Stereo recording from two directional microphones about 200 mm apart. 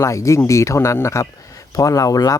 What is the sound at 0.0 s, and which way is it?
Speech, 15° left (ahead or behind).